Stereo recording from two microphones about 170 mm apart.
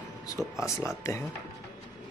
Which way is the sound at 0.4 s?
15° left (ahead or behind).